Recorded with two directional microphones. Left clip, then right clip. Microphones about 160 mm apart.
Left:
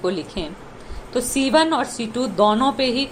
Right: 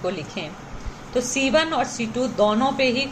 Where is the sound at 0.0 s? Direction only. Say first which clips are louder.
Left 3 dB; 35° left (ahead or behind).